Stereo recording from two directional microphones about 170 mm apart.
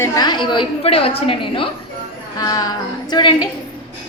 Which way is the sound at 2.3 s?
20° left (ahead or behind).